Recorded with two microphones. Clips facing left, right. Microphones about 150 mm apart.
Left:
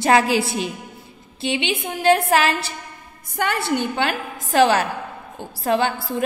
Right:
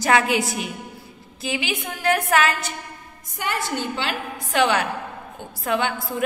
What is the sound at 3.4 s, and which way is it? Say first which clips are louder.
Speech: left 5 dB; 60° left (ahead or behind).